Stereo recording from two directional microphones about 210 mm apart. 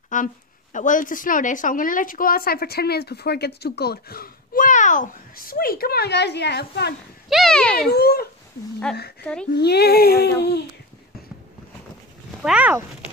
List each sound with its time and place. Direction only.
0.1 s a woman's voice: 40° left (ahead or behind)
7.2 s speech: centre (ahead or behind)
7.9 s a woman's voice: 50° left (ahead or behind)
8.9 s speech: 5° left (ahead or behind)
9.6 s a woman's voice: 50° left (ahead or behind)
12.4 s speech: 5° right (ahead or behind)